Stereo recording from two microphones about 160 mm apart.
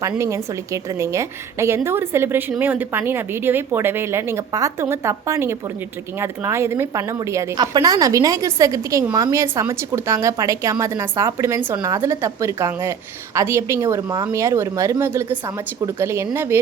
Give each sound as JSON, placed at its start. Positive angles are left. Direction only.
{"t": 0.2, "sound": "a woman's voice", "side_deg": -20}